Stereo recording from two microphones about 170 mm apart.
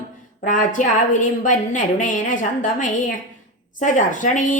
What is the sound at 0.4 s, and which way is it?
A woman's voice, 50° left (ahead or behind).